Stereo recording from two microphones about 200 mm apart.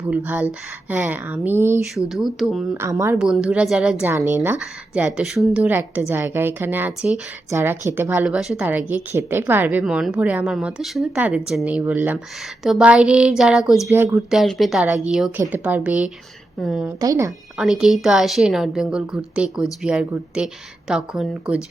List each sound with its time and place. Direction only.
0.1 s a woman's voice: 10° right (ahead or behind)
2.8 s a woman's voice: 15° right (ahead or behind)
3.2 s a woman's voice: 5° right (ahead or behind)
17.0 s a woman's voice: 15° right (ahead or behind)
17.6 s a woman's voice: centre (ahead or behind)